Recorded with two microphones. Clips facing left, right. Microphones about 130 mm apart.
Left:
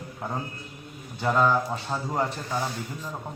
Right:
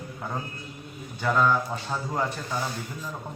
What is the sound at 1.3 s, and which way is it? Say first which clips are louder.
Speech: left 1 dB; 30° left (ahead or behind).